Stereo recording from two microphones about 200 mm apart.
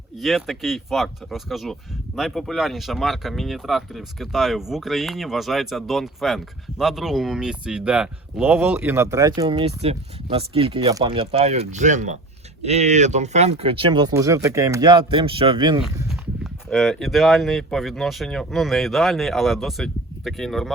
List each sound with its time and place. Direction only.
0.2 s speech: centre (ahead or behind); by 15.8 s 25° right (ahead or behind)
16.0 s speech: centre (ahead or behind)